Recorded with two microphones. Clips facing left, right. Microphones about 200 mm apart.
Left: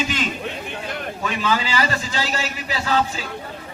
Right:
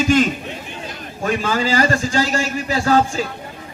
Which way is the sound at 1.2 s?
45° right (ahead or behind).